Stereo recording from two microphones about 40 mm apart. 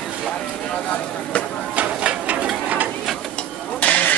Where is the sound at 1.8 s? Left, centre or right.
Right.